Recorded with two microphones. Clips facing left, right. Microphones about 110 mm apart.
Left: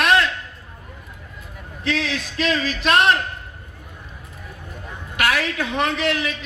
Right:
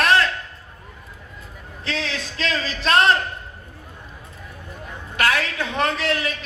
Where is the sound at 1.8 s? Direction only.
30° right (ahead or behind).